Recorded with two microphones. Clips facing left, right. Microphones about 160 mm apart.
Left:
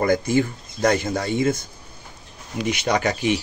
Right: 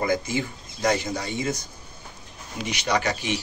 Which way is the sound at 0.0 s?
50° left (ahead or behind).